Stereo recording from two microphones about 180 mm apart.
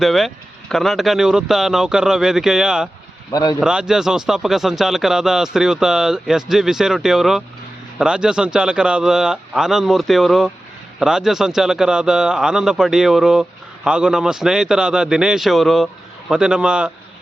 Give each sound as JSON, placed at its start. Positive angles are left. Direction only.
{"t": 0.0, "sound": "a man's voice", "side_deg": 0}
{"t": 3.3, "sound": "speech", "side_deg": 20}
{"t": 3.6, "sound": "a man's voice", "side_deg": -5}